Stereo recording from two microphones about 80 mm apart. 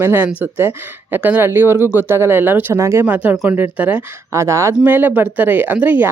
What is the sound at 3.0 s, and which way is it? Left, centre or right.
Speech, centre.